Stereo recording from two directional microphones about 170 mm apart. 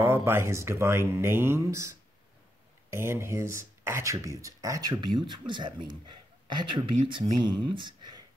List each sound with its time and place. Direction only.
0.0 s speech: 15° right (ahead or behind)